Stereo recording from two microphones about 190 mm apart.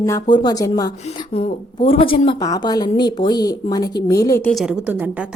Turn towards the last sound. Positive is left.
turn(degrees=-5)  # may be behind; listen again after turning